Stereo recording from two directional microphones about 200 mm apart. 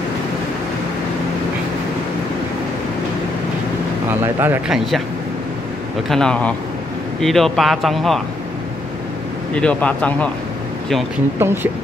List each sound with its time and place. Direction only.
4.2 s speech: 10° right (ahead or behind)
6.0 s speech: 5° left (ahead or behind)
9.5 s speech: 5° left (ahead or behind)
11.3 s speech: 10° right (ahead or behind)